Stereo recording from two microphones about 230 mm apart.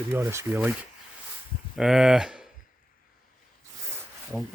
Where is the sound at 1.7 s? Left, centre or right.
Centre.